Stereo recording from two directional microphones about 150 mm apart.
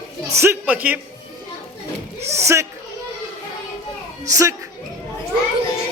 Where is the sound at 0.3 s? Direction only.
10° right (ahead or behind).